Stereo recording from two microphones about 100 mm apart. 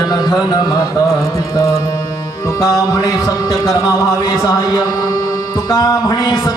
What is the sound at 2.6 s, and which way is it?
Speech, 40° left (ahead or behind).